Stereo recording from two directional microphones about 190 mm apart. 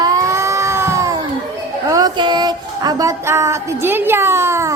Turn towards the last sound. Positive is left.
turn(degrees=-15)  # may be behind; listen again after turning